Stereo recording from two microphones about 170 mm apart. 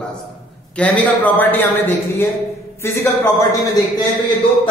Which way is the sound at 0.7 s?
10° left (ahead or behind).